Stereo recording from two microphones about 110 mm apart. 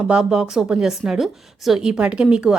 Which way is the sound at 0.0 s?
5° right (ahead or behind).